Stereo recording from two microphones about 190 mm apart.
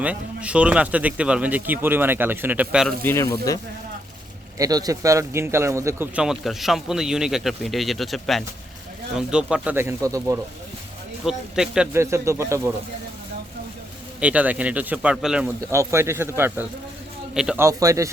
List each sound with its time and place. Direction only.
0.0 s speech: 5° right (ahead or behind)
3.0 s speech: 15° left (ahead or behind)
4.5 s a man's voice: 20° right (ahead or behind)
11.3 s a man's voice: 5° right (ahead or behind)
11.9 s speech: 15° right (ahead or behind)
14.2 s speech: 5° right (ahead or behind)
15.7 s a man's voice: 15° right (ahead or behind)
17.7 s speech: 15° right (ahead or behind)